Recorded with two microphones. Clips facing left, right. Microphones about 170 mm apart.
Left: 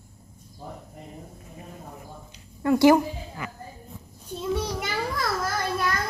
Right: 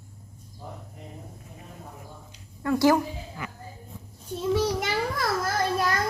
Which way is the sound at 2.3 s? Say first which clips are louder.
Left 4 dB; 20° left (ahead or behind).